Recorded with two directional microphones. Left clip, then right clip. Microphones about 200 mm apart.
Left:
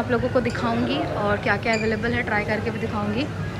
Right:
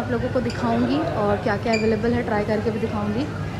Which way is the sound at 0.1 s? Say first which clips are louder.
Left 2 dB; 20° right (ahead or behind).